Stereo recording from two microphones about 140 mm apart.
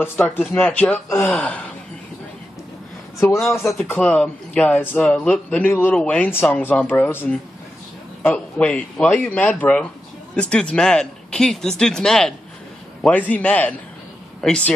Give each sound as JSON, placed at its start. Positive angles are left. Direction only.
{"t": 0.0, "sound": "speech", "side_deg": 15}
{"t": 1.3, "sound": "speech", "side_deg": 5}
{"t": 3.7, "sound": "speech", "side_deg": 10}